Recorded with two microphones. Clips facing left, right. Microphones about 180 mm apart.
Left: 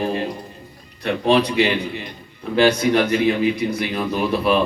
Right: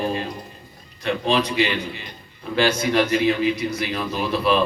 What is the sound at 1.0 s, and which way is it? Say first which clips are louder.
Speech: left 4 dB; 60° left (ahead or behind).